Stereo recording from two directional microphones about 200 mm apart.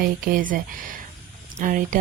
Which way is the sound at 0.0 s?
45° right (ahead or behind).